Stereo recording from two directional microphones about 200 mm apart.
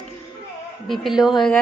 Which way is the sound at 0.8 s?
Centre (ahead or behind).